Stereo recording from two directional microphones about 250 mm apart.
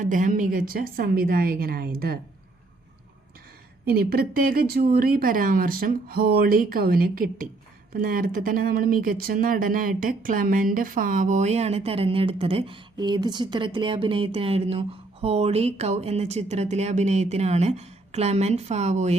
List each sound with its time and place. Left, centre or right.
0.0 s speech: right
3.8 s speech: right